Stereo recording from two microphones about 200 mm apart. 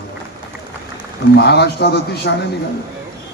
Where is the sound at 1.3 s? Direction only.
55° left (ahead or behind).